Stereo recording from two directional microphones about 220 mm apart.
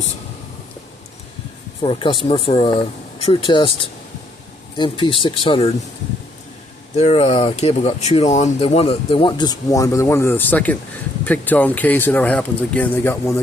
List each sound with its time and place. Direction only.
1.8 s speech: 25° left (ahead or behind)
6.9 s speech: 30° left (ahead or behind); by 13.4 s 10° left (ahead or behind)